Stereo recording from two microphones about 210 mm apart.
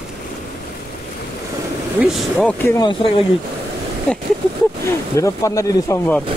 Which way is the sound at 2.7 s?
25° left (ahead or behind).